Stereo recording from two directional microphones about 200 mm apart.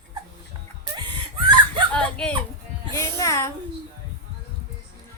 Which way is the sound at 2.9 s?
15° left (ahead or behind).